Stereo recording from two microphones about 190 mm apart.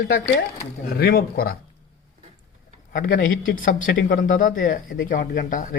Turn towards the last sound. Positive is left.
turn(degrees=45)  # may be behind; listen again after turning